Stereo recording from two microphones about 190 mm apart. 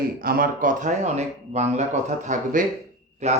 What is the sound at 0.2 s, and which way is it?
A man's voice, 50° right (ahead or behind).